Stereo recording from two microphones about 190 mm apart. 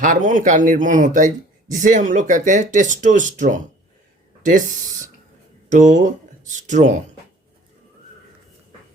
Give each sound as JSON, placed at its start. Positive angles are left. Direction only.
{"t": 0.0, "sound": "speech", "side_deg": -45}
{"t": 5.6, "sound": "speech", "side_deg": -40}